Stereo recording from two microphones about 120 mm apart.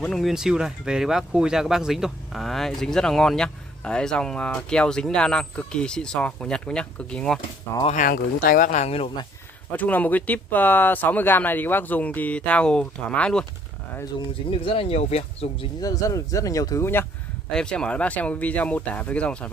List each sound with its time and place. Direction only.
0.0 s speech: centre (ahead or behind)
7.8 s speech: 90° left
8.6 s speech: 70° left (ahead or behind)
9.7 s speech: 15° left (ahead or behind)
14.5 s speech: 50° left (ahead or behind)
15.8 s speech: 30° left (ahead or behind)
17.5 s speech: 5° left (ahead or behind)